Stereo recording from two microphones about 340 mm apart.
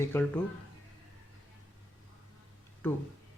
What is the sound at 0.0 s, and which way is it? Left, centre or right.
Speech, centre.